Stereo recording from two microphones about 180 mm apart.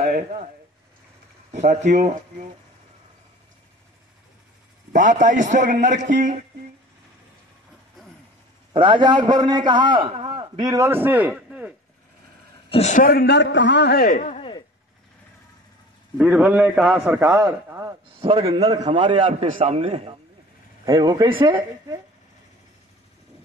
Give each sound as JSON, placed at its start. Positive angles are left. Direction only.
{"t": 0.0, "sound": "speech", "side_deg": -45}
{"t": 1.7, "sound": "a man's voice", "side_deg": -40}
{"t": 4.9, "sound": "a man's voice", "side_deg": -45}
{"t": 8.7, "sound": "a man's voice", "side_deg": -25}
{"t": 12.6, "sound": "a man's voice", "side_deg": 35}
{"t": 14.1, "sound": "speech", "side_deg": 40}
{"t": 16.2, "sound": "a man's voice", "side_deg": -5}
{"t": 17.0, "sound": "speech", "side_deg": -15}
{"t": 18.2, "sound": "a man's voice", "side_deg": -30}
{"t": 20.8, "sound": "a man's voice", "side_deg": -20}